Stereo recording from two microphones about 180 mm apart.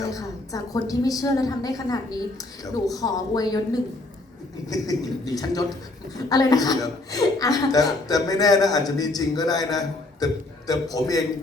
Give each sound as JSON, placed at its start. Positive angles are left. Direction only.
{"t": 0.0, "sound": "a woman's voice", "side_deg": 20}
{"t": 4.7, "sound": "a woman's voice", "side_deg": 20}